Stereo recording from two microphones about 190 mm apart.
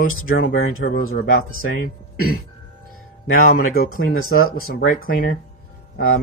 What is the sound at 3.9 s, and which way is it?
Speech, 90° left.